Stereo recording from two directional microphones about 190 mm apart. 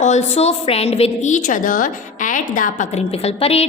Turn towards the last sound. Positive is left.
turn(degrees=30)  # may be behind; listen again after turning